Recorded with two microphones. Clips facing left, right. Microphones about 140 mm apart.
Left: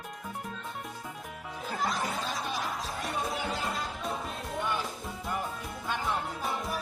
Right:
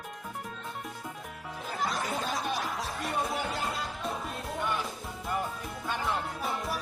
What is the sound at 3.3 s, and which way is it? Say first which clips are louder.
Music: even; centre (ahead or behind).